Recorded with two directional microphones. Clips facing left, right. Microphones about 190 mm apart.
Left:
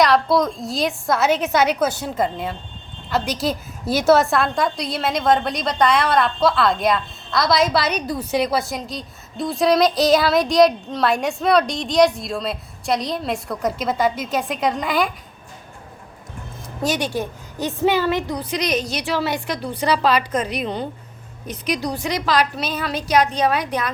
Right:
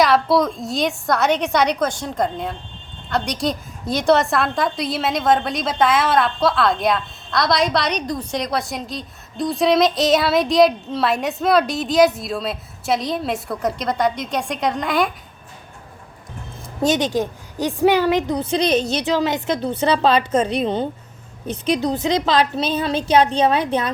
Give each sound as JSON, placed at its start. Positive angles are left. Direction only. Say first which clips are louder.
{"t": 0.0, "sound": "a woman's voice", "louder": "right 1 dB", "side_deg": 0}
{"t": 16.8, "sound": "a woman's voice", "louder": "right 4 dB", "side_deg": -20}